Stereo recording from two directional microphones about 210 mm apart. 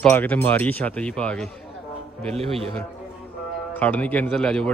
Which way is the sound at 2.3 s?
30° right (ahead or behind).